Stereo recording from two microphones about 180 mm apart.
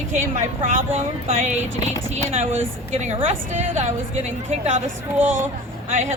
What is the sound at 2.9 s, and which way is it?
Speech, 35° right (ahead or behind).